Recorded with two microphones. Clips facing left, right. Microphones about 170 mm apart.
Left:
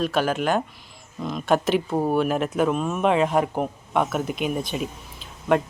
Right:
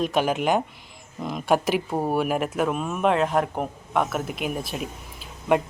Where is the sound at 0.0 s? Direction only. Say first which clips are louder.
Even; 15° right (ahead or behind).